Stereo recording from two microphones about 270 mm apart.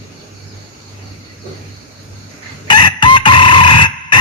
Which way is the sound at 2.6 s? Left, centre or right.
Centre.